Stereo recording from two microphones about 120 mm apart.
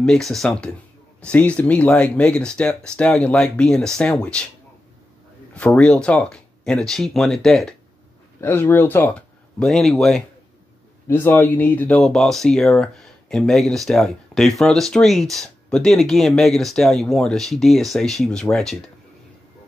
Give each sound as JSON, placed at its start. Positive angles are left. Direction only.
{"t": 0.0, "sound": "speech", "side_deg": 5}
{"t": 5.5, "sound": "speech", "side_deg": 10}
{"t": 8.4, "sound": "speech", "side_deg": 20}
{"t": 9.6, "sound": "speech", "side_deg": 5}
{"t": 11.1, "sound": "speech", "side_deg": 15}
{"t": 12.0, "sound": "speech", "side_deg": 0}